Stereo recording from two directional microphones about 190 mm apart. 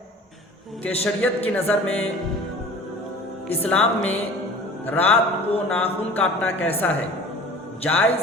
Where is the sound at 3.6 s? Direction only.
5° left (ahead or behind).